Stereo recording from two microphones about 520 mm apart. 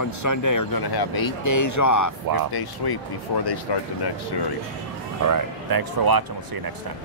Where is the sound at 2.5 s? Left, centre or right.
Left.